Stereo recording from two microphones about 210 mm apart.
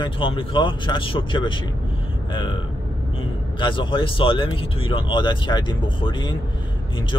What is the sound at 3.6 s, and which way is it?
Speech, 25° left (ahead or behind).